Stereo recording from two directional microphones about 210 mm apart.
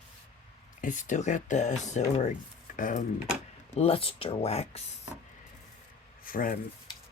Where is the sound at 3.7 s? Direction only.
30° left (ahead or behind).